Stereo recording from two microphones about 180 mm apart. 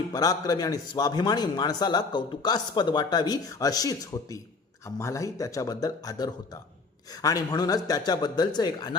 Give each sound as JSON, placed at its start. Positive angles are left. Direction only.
{"t": 0.1, "sound": "a man's voice", "side_deg": 20}